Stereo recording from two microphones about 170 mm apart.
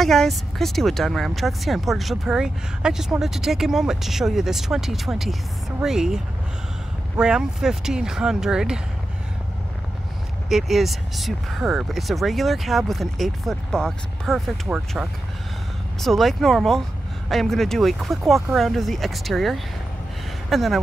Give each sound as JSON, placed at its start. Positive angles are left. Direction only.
{"t": 0.0, "sound": "speech", "side_deg": 0}
{"t": 10.5, "sound": "speech", "side_deg": 0}